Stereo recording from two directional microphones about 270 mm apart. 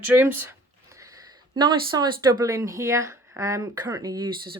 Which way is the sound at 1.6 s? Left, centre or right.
Centre.